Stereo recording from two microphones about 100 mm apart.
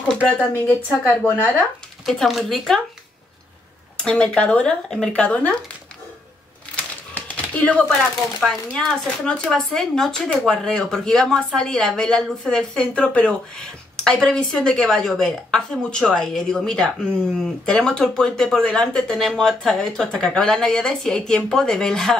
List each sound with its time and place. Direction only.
0.5 s a woman's voice: 20° left (ahead or behind)
2.0 s speech: centre (ahead or behind)
3.9 s speech: 10° left (ahead or behind)
6.8 s typewriter: 15° left (ahead or behind)
8.4 s speech: 5° left (ahead or behind)